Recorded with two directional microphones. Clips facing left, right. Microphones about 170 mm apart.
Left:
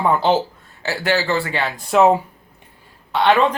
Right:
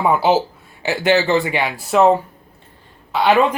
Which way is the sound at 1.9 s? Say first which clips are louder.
Even; 5° left (ahead or behind).